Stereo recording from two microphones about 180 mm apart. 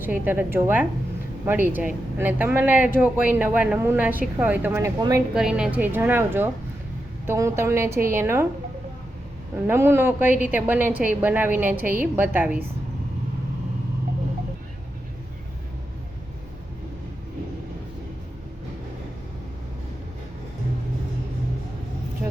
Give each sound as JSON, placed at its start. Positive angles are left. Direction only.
{"t": 0.0, "sound": "a woman's voice", "side_deg": -10}
{"t": 4.9, "sound": "speech", "side_deg": -20}
{"t": 5.3, "sound": "a woman's voice", "side_deg": -5}
{"t": 9.6, "sound": "a woman's voice", "side_deg": -15}